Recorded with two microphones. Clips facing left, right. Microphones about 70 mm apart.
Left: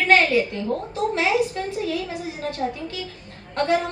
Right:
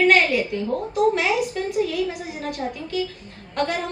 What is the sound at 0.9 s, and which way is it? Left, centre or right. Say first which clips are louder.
A woman's voice: right 2 dB; left.